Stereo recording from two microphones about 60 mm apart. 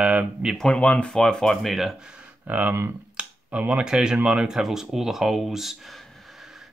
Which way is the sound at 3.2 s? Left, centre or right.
Centre.